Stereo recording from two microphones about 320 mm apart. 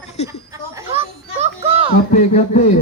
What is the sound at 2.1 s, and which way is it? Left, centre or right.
Speech, left.